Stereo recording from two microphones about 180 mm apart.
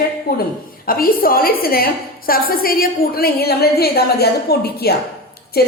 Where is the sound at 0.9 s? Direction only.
55° left (ahead or behind).